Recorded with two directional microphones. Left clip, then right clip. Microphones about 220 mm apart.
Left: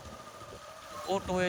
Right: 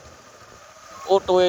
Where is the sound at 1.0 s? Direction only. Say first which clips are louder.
Right 14 dB; 35° right (ahead or behind).